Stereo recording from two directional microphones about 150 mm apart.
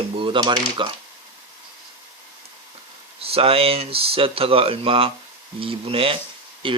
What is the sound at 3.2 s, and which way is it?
Speech, 40° right (ahead or behind).